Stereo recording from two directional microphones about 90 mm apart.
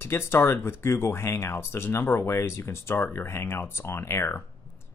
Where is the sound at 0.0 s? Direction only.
25° left (ahead or behind).